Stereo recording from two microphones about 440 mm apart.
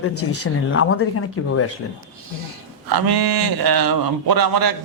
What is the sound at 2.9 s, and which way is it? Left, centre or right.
Speech, right.